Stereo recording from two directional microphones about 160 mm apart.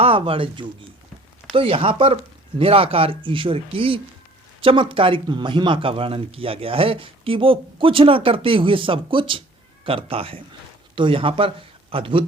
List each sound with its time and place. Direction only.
0.0 s speech: 35° right (ahead or behind)